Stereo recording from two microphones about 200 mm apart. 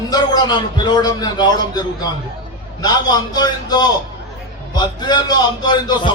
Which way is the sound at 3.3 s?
20° left (ahead or behind).